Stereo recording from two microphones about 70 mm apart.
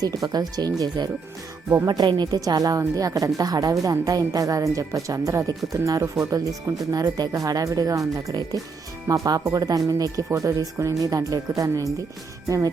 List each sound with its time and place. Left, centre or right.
0.0 s speech: right
1.9 s a woman's voice: right
6.9 s a woman's voice: right